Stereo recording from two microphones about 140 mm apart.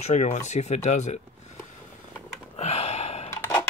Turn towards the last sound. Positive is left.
turn(degrees=20)  # may be behind; listen again after turning